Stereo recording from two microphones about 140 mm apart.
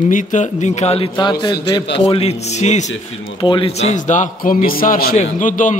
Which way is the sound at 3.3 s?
40° left (ahead or behind).